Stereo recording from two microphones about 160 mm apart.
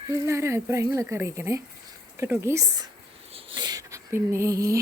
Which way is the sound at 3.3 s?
30° right (ahead or behind).